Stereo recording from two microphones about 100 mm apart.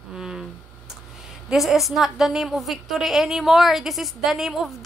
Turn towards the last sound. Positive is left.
turn(degrees=-5)  # may be behind; listen again after turning